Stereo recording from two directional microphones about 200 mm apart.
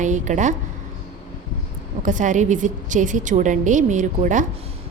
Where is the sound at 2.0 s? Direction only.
40° right (ahead or behind).